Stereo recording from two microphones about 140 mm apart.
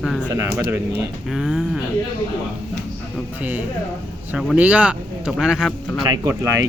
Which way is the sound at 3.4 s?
10° right (ahead or behind).